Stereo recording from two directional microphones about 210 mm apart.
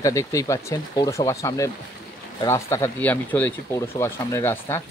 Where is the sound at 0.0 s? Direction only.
15° left (ahead or behind).